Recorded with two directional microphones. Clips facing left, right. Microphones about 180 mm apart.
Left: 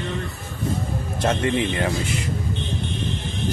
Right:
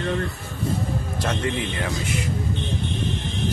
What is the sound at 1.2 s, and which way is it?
Speech, 25° left (ahead or behind).